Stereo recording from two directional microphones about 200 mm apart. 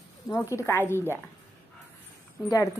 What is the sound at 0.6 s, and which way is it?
Speech, 15° left (ahead or behind).